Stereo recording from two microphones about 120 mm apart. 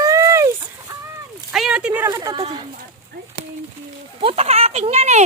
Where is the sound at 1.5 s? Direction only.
5° right (ahead or behind).